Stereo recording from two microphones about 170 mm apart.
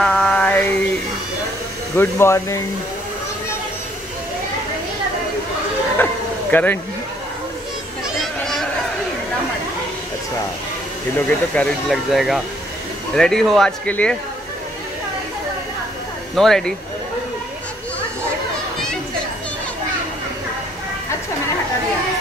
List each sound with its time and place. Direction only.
0.0 s a sound: 5° left (ahead or behind)
2.0 s speech: 15° left (ahead or behind)
6.5 s speech: 10° left (ahead or behind)
8.2 s a sound: centre (ahead or behind)
11.1 s speech: 10° left (ahead or behind)
16.3 s speech: centre (ahead or behind)